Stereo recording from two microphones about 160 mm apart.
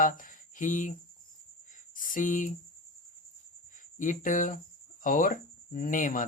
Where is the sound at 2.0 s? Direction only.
55° left (ahead or behind).